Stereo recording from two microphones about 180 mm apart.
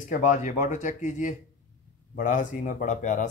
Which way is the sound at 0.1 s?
45° left (ahead or behind).